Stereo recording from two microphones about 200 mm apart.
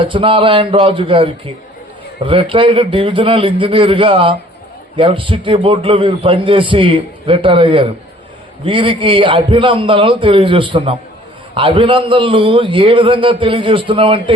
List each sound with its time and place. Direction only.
0.0 s a man's voice: 25° right (ahead or behind)